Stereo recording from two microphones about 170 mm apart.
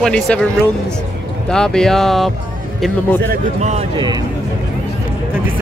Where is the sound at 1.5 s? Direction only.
5° left (ahead or behind).